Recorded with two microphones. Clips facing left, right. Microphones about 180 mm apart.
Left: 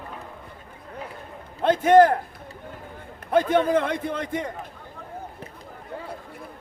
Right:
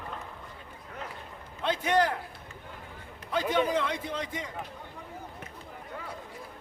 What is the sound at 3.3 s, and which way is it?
A man's voice, 55° left (ahead or behind).